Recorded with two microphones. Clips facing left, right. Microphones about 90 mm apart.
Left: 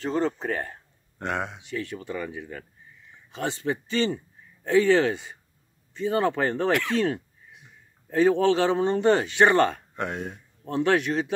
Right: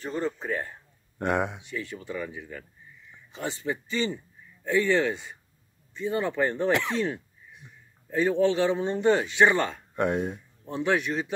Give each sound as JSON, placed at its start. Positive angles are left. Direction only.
{"t": 0.0, "sound": "speech", "side_deg": 85}
{"t": 1.2, "sound": "speech", "side_deg": -15}
{"t": 1.7, "sound": "speech", "side_deg": 65}
{"t": 3.3, "sound": "speech", "side_deg": 70}
{"t": 4.6, "sound": "speech", "side_deg": 85}
{"t": 8.1, "sound": "speech", "side_deg": 90}
{"t": 9.9, "sound": "speech", "side_deg": -15}
{"t": 10.6, "sound": "speech", "side_deg": 70}